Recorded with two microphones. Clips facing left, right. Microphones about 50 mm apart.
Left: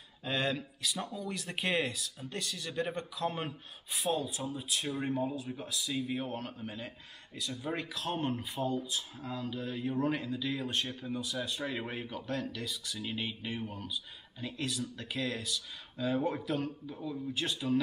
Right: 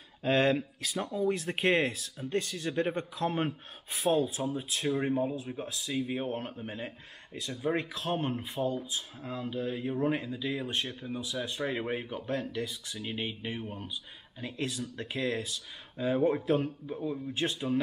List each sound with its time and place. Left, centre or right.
0.2 s speech: right
4.8 s speech: centre
16.2 s speech: centre
16.4 s speech: right